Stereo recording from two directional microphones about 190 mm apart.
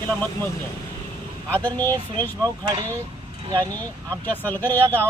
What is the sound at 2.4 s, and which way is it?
Speech, 20° right (ahead or behind).